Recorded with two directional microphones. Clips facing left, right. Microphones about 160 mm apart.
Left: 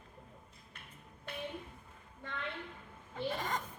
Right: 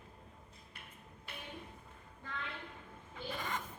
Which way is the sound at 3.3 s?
45° left (ahead or behind).